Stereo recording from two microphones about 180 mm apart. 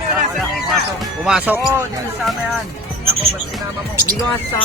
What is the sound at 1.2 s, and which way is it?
Speech, 5° right (ahead or behind).